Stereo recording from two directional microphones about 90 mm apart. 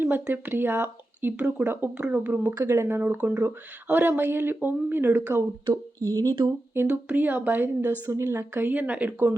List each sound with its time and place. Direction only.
0.0 s speech: 20° right (ahead or behind)
2.0 s speech: 10° right (ahead or behind)
2.6 s speech: 25° right (ahead or behind)
5.7 s speech: 40° right (ahead or behind)
6.7 s speech: 15° right (ahead or behind)
8.0 s speech: 30° right (ahead or behind); by 9.2 s 15° right (ahead or behind)